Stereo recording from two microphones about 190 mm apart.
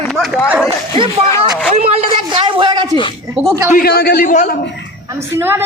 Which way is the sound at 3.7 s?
55° left (ahead or behind).